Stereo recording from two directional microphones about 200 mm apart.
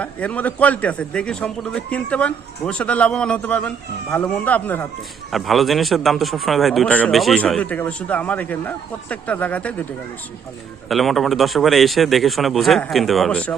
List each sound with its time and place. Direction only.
0.0 s a man's voice: 5° left (ahead or behind)
10.8 s a man's voice: centre (ahead or behind)